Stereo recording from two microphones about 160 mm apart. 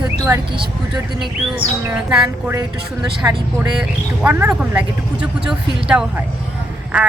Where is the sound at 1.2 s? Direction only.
5° right (ahead or behind).